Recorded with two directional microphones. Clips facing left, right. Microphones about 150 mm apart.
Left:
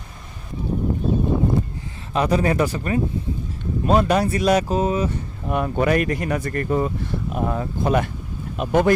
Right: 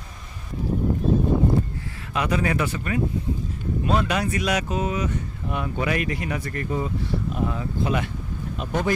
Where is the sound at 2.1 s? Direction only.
35° left (ahead or behind).